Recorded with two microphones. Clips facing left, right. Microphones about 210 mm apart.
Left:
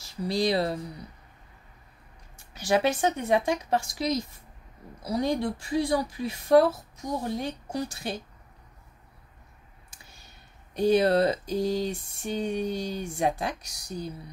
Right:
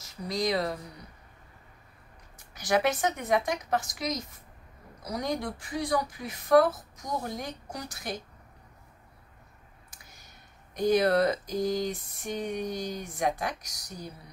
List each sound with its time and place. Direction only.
0.0 s speech: 30° left (ahead or behind)
2.5 s a woman's voice: 30° left (ahead or behind)
9.8 s speech: 30° left (ahead or behind)